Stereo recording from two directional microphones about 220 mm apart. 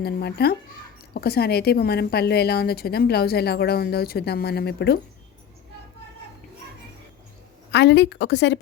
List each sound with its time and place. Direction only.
0.0 s a woman's voice: 45° left (ahead or behind)
7.7 s a woman's voice: 50° left (ahead or behind)